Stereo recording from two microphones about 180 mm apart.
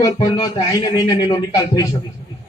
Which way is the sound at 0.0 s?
20° left (ahead or behind).